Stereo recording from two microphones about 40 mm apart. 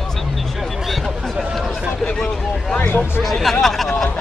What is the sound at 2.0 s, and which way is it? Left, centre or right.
Vehicle, centre.